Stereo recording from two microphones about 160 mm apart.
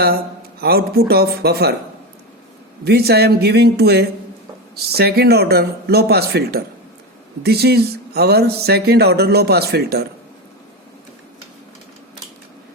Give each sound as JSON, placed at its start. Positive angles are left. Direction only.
{"t": 0.6, "sound": "speech", "side_deg": -75}
{"t": 2.8, "sound": "speech", "side_deg": -85}
{"t": 4.7, "sound": "speech", "side_deg": -80}